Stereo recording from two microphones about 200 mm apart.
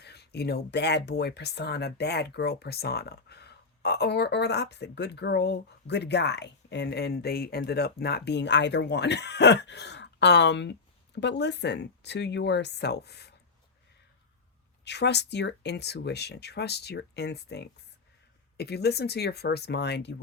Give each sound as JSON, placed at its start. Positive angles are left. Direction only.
{"t": 0.0, "sound": "speech", "side_deg": 55}
{"t": 14.8, "sound": "speech", "side_deg": 60}